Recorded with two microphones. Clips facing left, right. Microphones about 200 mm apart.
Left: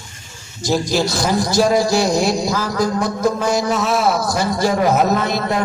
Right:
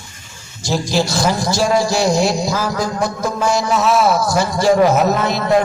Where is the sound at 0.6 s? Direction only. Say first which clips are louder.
Even; 50° left (ahead or behind).